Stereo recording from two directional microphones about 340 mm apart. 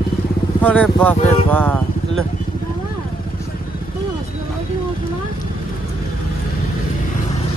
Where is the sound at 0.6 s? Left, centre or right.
Centre.